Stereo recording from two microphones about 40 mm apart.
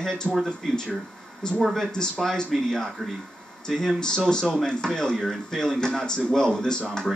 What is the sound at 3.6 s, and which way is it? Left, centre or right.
Speech, centre.